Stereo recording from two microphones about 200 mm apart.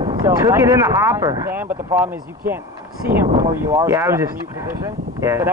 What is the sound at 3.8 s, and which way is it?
Speech, 15° right (ahead or behind).